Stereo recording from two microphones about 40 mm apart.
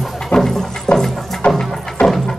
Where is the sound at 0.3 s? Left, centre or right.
Centre.